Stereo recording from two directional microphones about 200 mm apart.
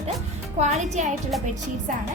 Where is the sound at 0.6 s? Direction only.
35° right (ahead or behind).